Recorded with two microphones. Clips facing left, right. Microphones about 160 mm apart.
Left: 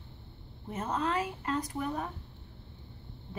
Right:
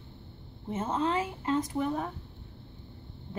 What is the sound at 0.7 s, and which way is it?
Speech, 25° right (ahead or behind).